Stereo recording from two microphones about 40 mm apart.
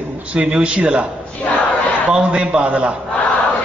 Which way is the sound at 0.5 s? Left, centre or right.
Right.